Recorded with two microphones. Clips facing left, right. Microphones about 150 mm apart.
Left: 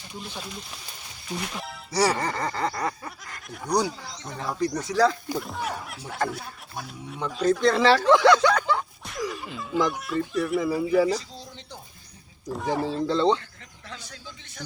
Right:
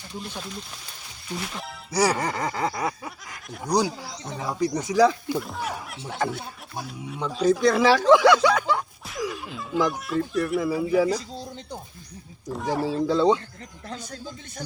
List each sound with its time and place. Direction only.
1.4 s speech: centre (ahead or behind)
5.4 s speech: centre (ahead or behind)
12.5 s speech: centre (ahead or behind)
13.8 s speech: 40° right (ahead or behind)